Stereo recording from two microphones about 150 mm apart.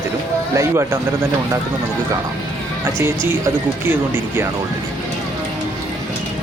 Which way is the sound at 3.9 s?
15° right (ahead or behind).